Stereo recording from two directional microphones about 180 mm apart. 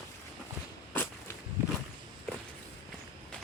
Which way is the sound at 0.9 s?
10° left (ahead or behind).